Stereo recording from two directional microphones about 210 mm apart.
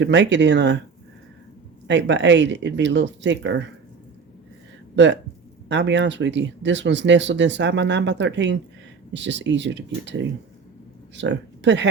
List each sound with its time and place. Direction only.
0.0 s speech: 60° right (ahead or behind)
1.9 s speech: 60° right (ahead or behind)
5.6 s speech: 60° right (ahead or behind)
11.2 s speech: 60° right (ahead or behind)